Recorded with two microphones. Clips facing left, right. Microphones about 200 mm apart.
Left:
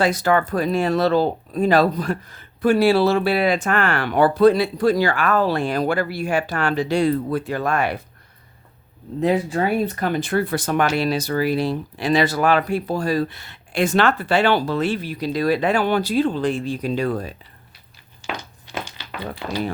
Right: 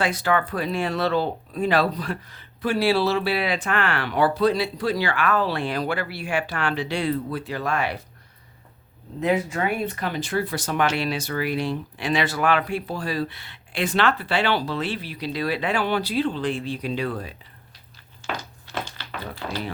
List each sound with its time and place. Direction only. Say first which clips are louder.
0.0 s speech: left 4 dB; 40° left (ahead or behind)
9.2 s speech: left 3 dB; 35° left (ahead or behind)
18.2 s a sound: left 1 dB; 15° left (ahead or behind)